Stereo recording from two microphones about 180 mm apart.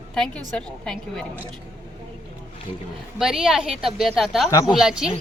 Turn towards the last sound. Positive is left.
turn(degrees=-5)  # may be behind; listen again after turning